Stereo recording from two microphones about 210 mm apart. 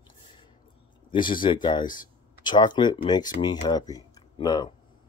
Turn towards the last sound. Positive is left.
turn(degrees=20)  # may be behind; listen again after turning